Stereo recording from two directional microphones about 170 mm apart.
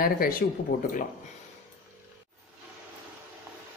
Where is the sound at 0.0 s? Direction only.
60° left (ahead or behind).